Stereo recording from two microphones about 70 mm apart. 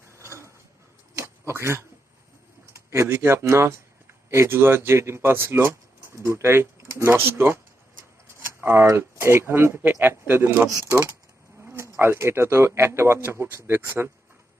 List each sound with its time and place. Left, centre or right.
0.1 s mechanisms: right
1.1 s a sound: right
2.7 s speech: right
8.4 s a sound: right
9.0 s speech: right
10.7 s speech: right
11.6 s speech: right